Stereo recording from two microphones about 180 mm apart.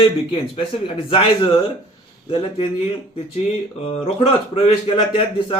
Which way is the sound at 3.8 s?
35° left (ahead or behind).